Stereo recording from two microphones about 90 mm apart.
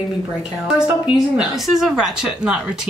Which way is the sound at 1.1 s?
5° right (ahead or behind).